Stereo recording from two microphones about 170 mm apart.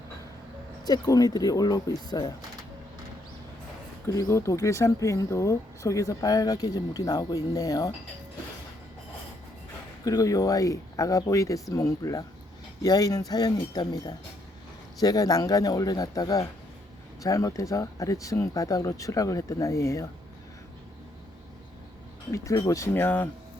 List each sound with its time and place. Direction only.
0.9 s speech: 20° left (ahead or behind)
4.0 s speech: 20° left (ahead or behind)
10.0 s speech: 20° left (ahead or behind)
22.3 s speech: 20° left (ahead or behind)